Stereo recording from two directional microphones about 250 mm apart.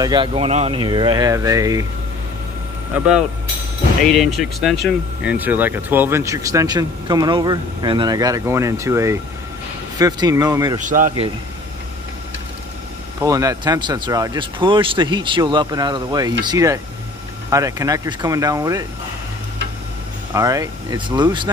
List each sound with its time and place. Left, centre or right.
0.0 s speech: centre
2.9 s speech: centre
10.8 s a man's voice: right
13.2 s speech: centre
20.3 s speech: centre